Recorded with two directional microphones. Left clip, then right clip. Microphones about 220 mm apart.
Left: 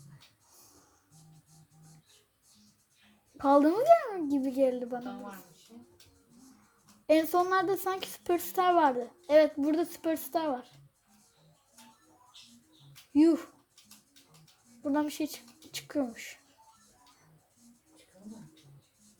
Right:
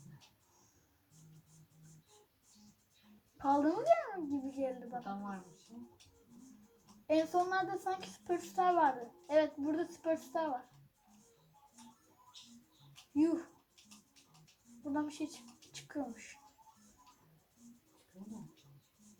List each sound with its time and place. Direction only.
3.3 s a woman's voice: 50° left (ahead or behind)
7.1 s a woman's voice: 50° left (ahead or behind)
13.1 s a woman's voice: 50° left (ahead or behind)
14.9 s speech: 50° left (ahead or behind)